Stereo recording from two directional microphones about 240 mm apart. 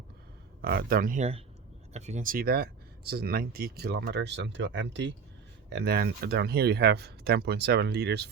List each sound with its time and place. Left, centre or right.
0.6 s speech: right